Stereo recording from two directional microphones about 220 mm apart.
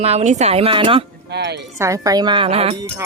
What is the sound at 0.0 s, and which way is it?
Speech, 30° right (ahead or behind).